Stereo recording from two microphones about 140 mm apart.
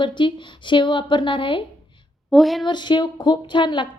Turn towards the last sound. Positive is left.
turn(degrees=35)  # may be behind; listen again after turning